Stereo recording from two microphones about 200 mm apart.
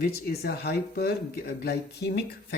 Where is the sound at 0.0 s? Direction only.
50° left (ahead or behind).